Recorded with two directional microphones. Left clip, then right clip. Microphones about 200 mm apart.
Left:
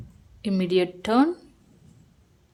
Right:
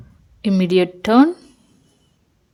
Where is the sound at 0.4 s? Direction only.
35° right (ahead or behind).